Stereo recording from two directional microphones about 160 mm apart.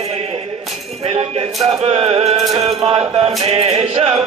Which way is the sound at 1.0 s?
40° right (ahead or behind).